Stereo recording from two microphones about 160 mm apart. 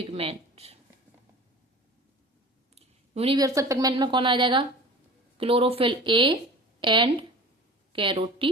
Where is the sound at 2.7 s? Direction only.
40° right (ahead or behind).